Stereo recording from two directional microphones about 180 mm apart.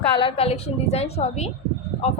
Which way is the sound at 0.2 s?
30° left (ahead or behind).